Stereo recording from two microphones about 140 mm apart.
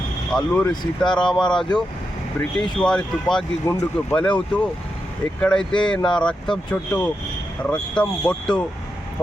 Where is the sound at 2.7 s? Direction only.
5° left (ahead or behind).